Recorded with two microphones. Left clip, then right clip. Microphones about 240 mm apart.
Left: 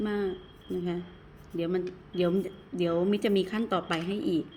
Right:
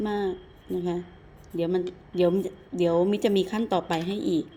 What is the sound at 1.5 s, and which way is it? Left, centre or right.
Speech, centre.